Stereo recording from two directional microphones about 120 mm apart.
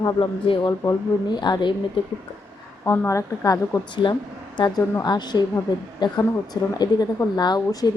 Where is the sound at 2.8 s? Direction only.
20° left (ahead or behind).